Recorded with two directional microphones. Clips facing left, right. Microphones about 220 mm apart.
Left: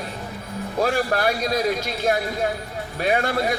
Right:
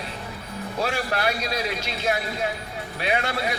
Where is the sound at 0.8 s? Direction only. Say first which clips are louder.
Left 5 dB; 45° left (ahead or behind).